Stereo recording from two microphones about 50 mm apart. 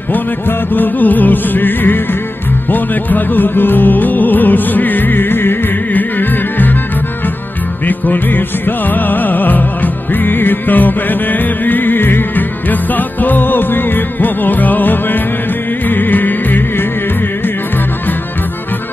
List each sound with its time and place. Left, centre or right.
0.1 s music: left
8.1 s music: left